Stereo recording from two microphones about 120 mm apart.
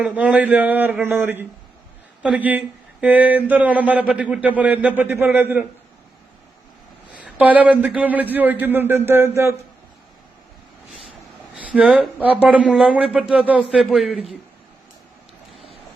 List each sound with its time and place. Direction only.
0.0 s speech: 10° right (ahead or behind)
7.1 s speech: 10° right (ahead or behind)
11.5 s a man's voice: 10° right (ahead or behind)